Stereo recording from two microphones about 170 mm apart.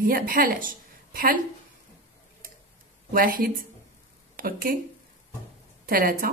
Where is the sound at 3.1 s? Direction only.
60° right (ahead or behind).